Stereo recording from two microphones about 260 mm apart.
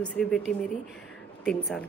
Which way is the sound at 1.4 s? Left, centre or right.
Centre.